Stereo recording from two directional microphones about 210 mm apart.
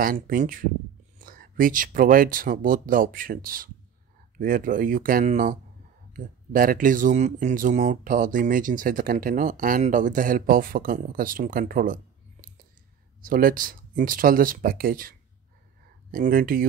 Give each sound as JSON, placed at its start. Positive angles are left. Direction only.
{"t": 0.0, "sound": "speech", "side_deg": -40}